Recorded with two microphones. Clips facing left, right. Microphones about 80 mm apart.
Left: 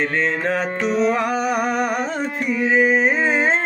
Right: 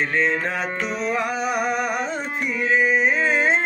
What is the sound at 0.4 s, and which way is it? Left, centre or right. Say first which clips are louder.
Music: left 5 dB; left.